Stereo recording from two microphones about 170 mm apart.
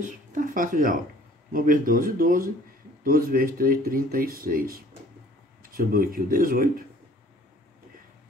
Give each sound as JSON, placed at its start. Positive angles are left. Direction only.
{"t": 0.0, "sound": "speech", "side_deg": -50}